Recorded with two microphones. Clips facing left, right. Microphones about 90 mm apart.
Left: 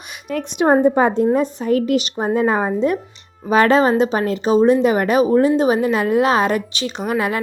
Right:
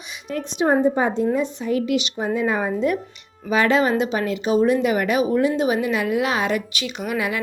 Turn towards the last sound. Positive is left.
turn(degrees=40)  # may be behind; listen again after turning